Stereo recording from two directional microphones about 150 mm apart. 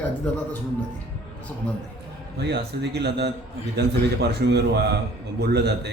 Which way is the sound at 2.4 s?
90° right.